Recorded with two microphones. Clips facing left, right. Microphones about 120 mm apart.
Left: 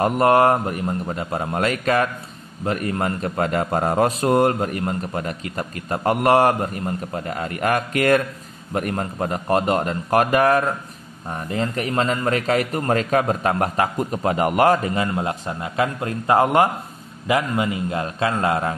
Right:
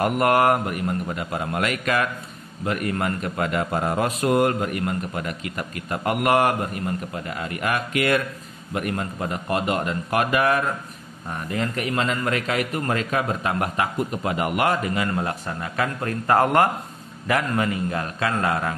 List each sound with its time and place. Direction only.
0.0 s a man's voice: 25° left (ahead or behind)
15.0 s a man's voice: 20° left (ahead or behind)